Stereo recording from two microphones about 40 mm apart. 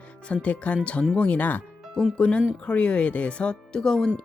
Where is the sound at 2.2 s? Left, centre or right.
Left.